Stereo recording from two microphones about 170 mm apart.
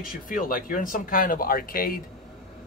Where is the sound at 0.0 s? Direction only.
55° left (ahead or behind).